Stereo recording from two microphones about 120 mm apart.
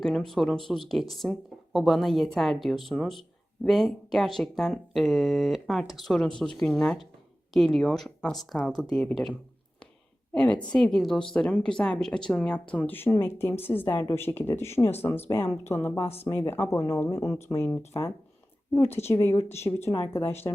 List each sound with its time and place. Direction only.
0.0 s speech: 5° left (ahead or behind)
10.3 s speech: 10° left (ahead or behind)